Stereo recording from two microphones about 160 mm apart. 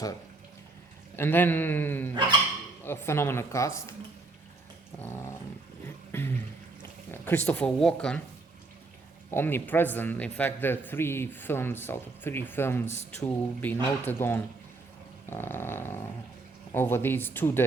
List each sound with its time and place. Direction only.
1.1 s a man's voice: 15° left (ahead or behind)
4.9 s a man's voice: 15° left (ahead or behind)
6.1 s a sound: 15° left (ahead or behind)
7.1 s a man's voice: 10° left (ahead or behind)
9.3 s a man's voice: 15° left (ahead or behind)